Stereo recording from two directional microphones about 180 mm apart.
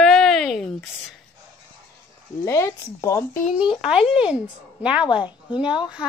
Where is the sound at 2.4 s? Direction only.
15° left (ahead or behind).